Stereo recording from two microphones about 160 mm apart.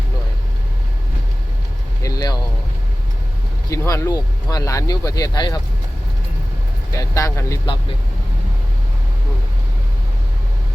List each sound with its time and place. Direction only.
2.0 s vehicle: 25° left (ahead or behind)
3.7 s speech: 20° left (ahead or behind)
6.9 s speech: 20° left (ahead or behind)